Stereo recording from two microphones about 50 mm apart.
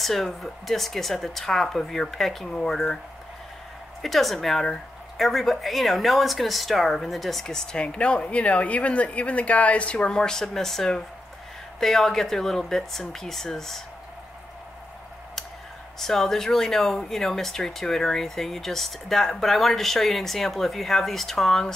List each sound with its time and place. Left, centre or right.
0.0 s speech: centre
4.0 s speech: centre
7.4 s speech: centre
16.0 s speech: centre